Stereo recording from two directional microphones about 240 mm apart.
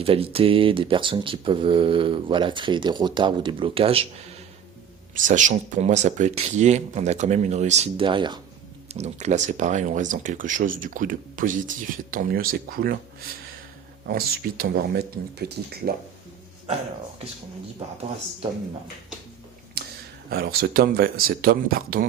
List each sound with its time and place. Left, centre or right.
0.0 s speech: right
14.1 s speech: right
19.8 s a sound: right
20.3 s speech: right